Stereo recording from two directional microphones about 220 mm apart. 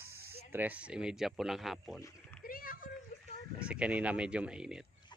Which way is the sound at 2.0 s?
15° left (ahead or behind).